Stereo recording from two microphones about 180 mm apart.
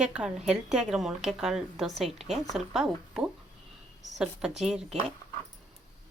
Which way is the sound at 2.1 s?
35° right (ahead or behind).